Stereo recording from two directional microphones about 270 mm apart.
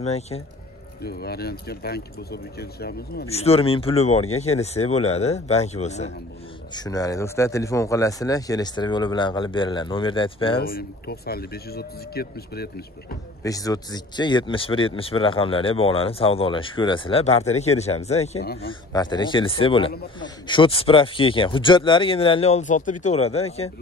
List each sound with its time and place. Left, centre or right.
0.0 s speech: left
1.0 s speech: left
3.3 s speech: left
6.7 s a man's voice: centre
10.6 s speech: left
13.4 s speech: centre
18.4 s speech: left
18.7 s speech: centre